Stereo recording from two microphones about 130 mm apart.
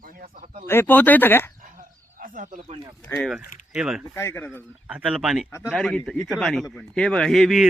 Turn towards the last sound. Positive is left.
turn(degrees=0)  # may be behind; listen again after turning